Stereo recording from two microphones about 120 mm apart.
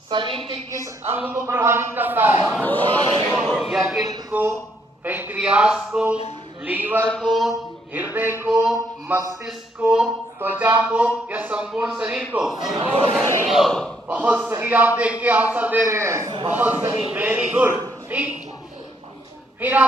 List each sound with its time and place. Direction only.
0.1 s a woman's voice: 45° right (ahead or behind)
1.0 s a man's voice: 20° right (ahead or behind)
2.6 s speech: 15° left (ahead or behind)
3.5 s a sound: centre (ahead or behind)
4.3 s speech: 15° right (ahead or behind)
7.1 s speech: 5° left (ahead or behind)
8.1 s speech: 20° right (ahead or behind)
8.6 s a sound: 5° right (ahead or behind)
10.4 s speech: 15° right (ahead or behind)
12.8 s speech: 55° right (ahead or behind)
13.4 s speech: centre (ahead or behind)
14.1 s a man's voice: 15° right (ahead or behind)
19.5 s speech: 15° right (ahead or behind)